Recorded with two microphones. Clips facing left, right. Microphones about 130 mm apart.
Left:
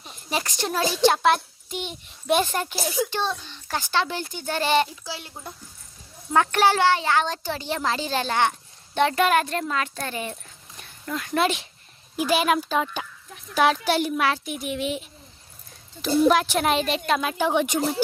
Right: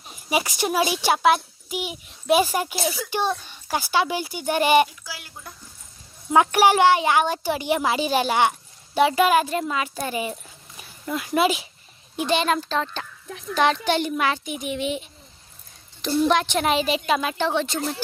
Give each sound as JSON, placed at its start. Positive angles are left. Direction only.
{"t": 0.1, "sound": "a child's voice", "side_deg": -10}
{"t": 4.9, "sound": "speech", "side_deg": 25}
{"t": 6.3, "sound": "a child's voice", "side_deg": -15}
{"t": 17.4, "sound": "speech", "side_deg": 15}